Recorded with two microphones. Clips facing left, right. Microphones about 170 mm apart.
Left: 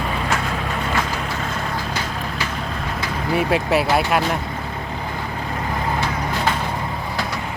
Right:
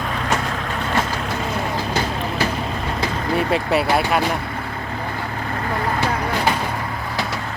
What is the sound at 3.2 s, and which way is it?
Speech, centre (ahead or behind).